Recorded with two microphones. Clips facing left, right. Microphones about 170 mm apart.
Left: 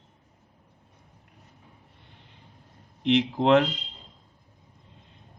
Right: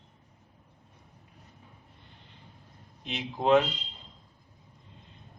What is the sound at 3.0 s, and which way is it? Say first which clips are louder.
Speech: left 9 dB; 75° left (ahead or behind).